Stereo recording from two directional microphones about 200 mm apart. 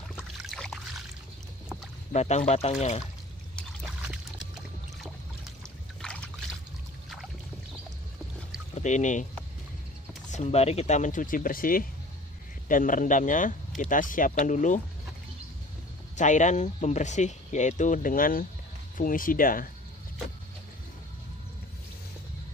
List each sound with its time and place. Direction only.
0.1 s boat: centre (ahead or behind)
2.1 s speech: 35° left (ahead or behind)
3.8 s boat: 5° right (ahead or behind)
6.0 s trickle: 5° left (ahead or behind)
8.7 s speech: 35° left (ahead or behind)
10.3 s speech: 35° left (ahead or behind)
16.2 s speech: 35° left (ahead or behind)